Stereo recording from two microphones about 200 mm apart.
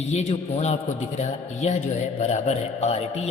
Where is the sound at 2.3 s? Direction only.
35° left (ahead or behind).